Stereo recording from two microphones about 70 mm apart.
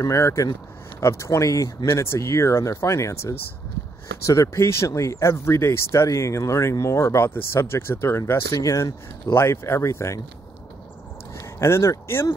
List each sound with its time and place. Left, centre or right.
0.0 s speech: left
9.3 s speech: left
11.3 s speech: left